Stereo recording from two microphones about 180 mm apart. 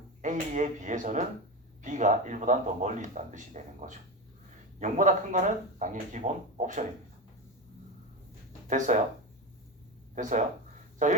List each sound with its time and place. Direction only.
0.2 s speech: 45° right (ahead or behind)
8.6 s speech: 45° right (ahead or behind)
10.2 s speech: 45° right (ahead or behind)